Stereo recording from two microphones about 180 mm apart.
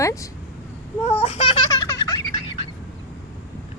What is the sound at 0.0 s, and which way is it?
Speech, 15° left (ahead or behind).